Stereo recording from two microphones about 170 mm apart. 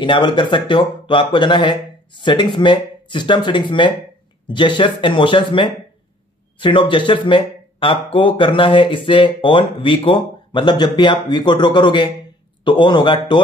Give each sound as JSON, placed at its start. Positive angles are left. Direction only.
{"t": 0.0, "sound": "speech", "side_deg": 30}